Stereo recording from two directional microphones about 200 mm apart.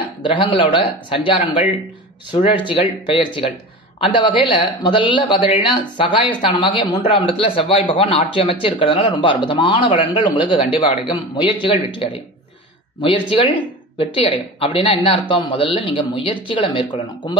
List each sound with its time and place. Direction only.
0.2 s speech: 25° left (ahead or behind)